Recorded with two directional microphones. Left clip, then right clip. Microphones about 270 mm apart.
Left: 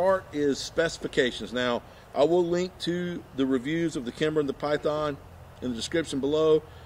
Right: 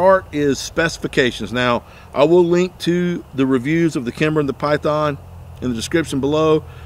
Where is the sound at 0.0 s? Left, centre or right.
Right.